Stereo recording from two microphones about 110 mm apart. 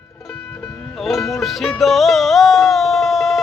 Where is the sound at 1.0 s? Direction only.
Centre (ahead or behind).